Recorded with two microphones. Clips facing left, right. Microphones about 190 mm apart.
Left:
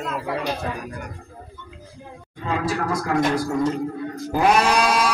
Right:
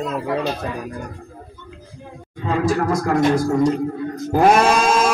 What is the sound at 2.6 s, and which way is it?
Speech, 45° right (ahead or behind).